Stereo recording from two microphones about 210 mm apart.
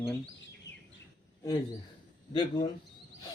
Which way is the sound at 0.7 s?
55° left (ahead or behind).